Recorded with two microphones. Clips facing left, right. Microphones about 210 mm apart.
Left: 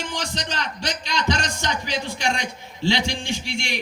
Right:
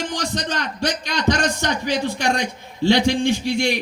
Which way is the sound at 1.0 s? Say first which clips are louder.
Right 4 dB; 55° right (ahead or behind).